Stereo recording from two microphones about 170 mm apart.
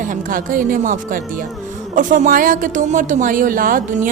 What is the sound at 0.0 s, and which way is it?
A woman's voice, 50° right (ahead or behind).